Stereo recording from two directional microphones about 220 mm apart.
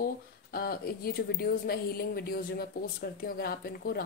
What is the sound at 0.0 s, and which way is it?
A woman's voice, 45° left (ahead or behind).